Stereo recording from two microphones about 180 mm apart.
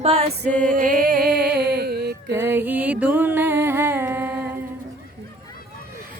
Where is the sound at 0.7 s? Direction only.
50° right (ahead or behind).